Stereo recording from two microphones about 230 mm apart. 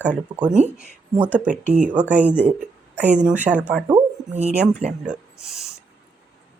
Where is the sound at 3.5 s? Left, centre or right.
Centre.